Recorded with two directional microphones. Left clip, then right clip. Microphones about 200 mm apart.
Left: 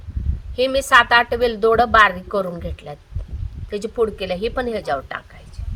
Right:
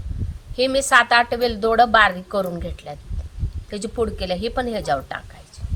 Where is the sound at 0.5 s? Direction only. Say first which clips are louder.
Left 2 dB; 20° left (ahead or behind).